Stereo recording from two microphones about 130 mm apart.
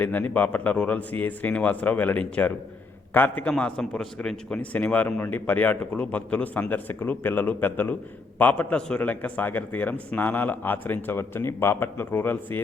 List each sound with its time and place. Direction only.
0.0 s a man's voice: 15° left (ahead or behind)